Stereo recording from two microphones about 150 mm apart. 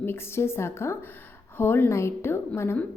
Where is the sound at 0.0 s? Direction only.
15° left (ahead or behind).